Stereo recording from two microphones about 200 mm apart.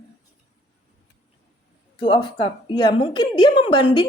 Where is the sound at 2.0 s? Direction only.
25° left (ahead or behind).